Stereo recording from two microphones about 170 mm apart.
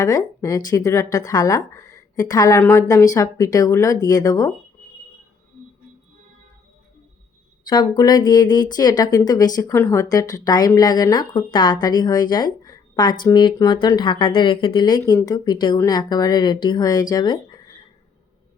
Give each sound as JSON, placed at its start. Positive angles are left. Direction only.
{"t": 0.0, "sound": "speech", "side_deg": 20}
{"t": 7.7, "sound": "speech", "side_deg": 25}